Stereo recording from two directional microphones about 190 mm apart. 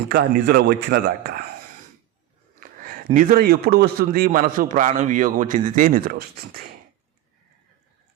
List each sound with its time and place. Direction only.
0.1 s a man's voice: 55° right (ahead or behind)
2.6 s a man's voice: 45° right (ahead or behind)